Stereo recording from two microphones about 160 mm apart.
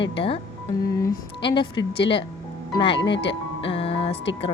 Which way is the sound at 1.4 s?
30° left (ahead or behind).